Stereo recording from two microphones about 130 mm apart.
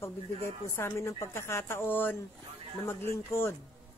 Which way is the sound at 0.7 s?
20° left (ahead or behind).